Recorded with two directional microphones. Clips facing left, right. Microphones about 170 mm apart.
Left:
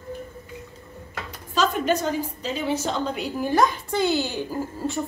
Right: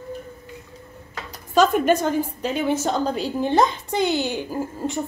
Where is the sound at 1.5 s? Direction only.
50° right (ahead or behind).